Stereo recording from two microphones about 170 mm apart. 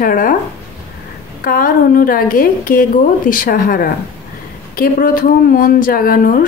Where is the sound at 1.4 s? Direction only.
55° left (ahead or behind).